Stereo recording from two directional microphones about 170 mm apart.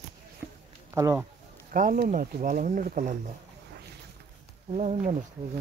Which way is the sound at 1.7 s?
55° right (ahead or behind).